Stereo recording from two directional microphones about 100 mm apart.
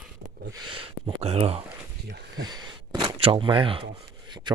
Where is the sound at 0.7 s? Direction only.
60° right (ahead or behind); by 1.6 s 85° right.